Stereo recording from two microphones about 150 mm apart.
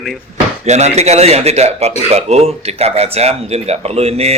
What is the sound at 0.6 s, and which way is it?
Speech, 50° right (ahead or behind).